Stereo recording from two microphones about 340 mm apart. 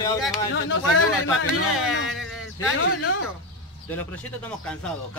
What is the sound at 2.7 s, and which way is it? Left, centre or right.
Speech, left.